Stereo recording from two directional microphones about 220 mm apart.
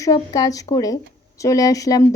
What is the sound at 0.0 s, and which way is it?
A woman's voice, 15° left (ahead or behind).